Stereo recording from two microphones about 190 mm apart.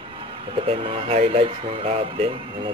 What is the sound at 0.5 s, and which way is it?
Speech, 30° right (ahead or behind).